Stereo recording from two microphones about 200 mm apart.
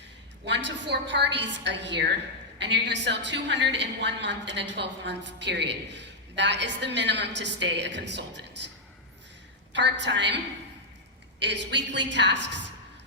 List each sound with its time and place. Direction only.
0.4 s a woman's voice: 60° right (ahead or behind)
9.7 s a woman's voice: 60° right (ahead or behind)